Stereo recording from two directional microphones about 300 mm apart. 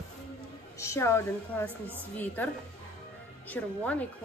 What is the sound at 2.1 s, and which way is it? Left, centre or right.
Speech, centre.